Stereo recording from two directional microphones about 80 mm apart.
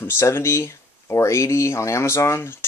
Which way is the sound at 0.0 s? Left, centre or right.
Left.